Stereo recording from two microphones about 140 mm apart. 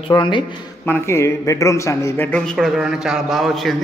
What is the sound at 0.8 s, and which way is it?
A man's voice, 15° left (ahead or behind).